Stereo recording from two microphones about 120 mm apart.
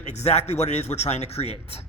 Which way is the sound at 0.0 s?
70° left (ahead or behind).